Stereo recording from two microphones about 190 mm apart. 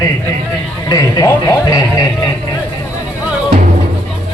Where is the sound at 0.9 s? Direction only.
15° left (ahead or behind).